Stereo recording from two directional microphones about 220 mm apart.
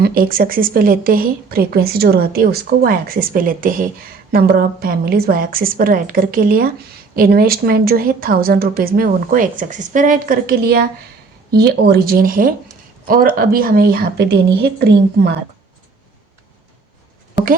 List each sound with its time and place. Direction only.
0.0 s a woman's voice: 40° right (ahead or behind)